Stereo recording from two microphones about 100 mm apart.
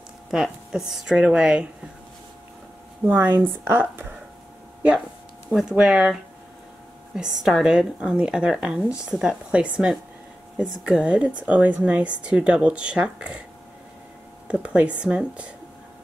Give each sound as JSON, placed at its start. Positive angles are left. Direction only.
{"t": 0.3, "sound": "speech", "side_deg": -5}
{"t": 3.1, "sound": "speech", "side_deg": -20}
{"t": 5.5, "sound": "speech", "side_deg": 0}
{"t": 14.5, "sound": "speech", "side_deg": -10}